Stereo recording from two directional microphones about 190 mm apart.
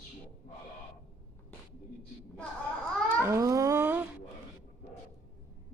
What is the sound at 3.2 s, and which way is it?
Speech, 15° right (ahead or behind).